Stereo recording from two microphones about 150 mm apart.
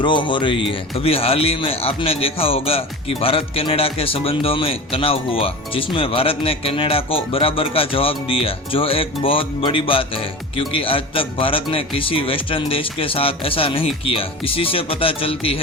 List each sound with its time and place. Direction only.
0.0 s speech: 30° left (ahead or behind)